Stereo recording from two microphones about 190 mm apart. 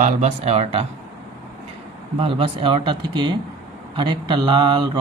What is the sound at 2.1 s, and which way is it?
Speech, 30° right (ahead or behind).